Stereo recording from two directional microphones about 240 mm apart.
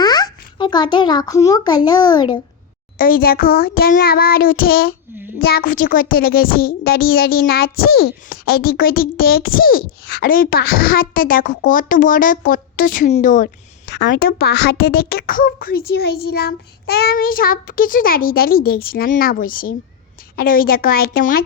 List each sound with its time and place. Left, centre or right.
0.0 s a child's voice: centre
3.0 s speech: left